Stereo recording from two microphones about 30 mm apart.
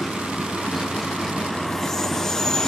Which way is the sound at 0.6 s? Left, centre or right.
Centre.